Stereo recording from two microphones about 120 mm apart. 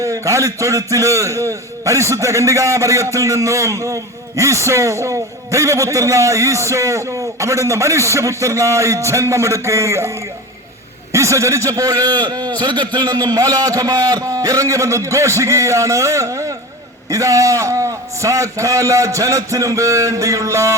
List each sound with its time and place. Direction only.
0.0 s a man's voice: 25° right (ahead or behind)
11.1 s a man's voice: 25° right (ahead or behind)